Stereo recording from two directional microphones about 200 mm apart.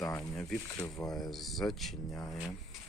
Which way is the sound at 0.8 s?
15° left (ahead or behind).